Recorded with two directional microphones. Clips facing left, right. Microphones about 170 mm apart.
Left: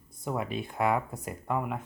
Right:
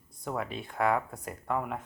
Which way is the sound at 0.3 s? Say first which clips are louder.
Left 2 dB; 10° left (ahead or behind).